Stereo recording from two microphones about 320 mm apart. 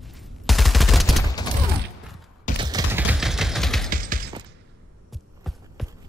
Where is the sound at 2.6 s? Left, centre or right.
Centre.